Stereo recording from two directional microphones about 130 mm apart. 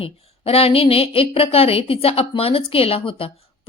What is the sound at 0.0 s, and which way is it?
A woman's voice, 50° left (ahead or behind).